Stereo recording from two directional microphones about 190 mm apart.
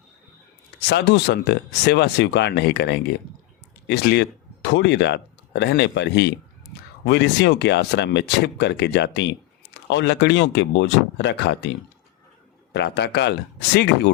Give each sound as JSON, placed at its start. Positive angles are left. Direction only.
{"t": 0.8, "sound": "speech", "side_deg": 65}
{"t": 12.7, "sound": "speech", "side_deg": 65}